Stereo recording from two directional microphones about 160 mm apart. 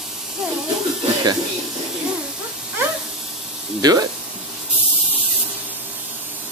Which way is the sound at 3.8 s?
25° right (ahead or behind).